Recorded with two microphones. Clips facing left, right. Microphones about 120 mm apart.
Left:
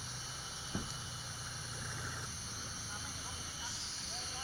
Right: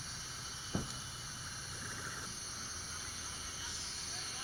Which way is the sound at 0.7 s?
15° right (ahead or behind).